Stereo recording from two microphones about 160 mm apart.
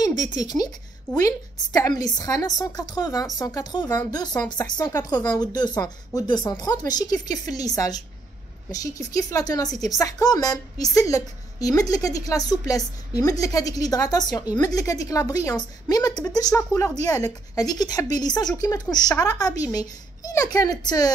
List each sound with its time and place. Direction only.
0.0 s a woman's voice: 25° left (ahead or behind)